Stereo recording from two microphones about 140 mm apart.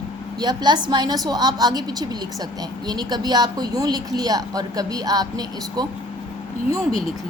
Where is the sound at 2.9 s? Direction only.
30° right (ahead or behind).